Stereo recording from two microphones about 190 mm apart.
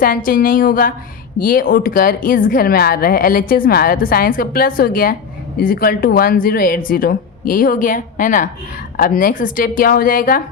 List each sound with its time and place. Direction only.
0.0 s a woman's voice: 50° left (ahead or behind)